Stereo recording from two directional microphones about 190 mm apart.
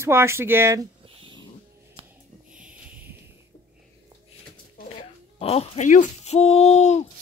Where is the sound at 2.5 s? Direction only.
5° right (ahead or behind).